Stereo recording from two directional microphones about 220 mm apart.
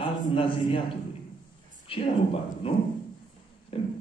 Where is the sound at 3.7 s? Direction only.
25° left (ahead or behind).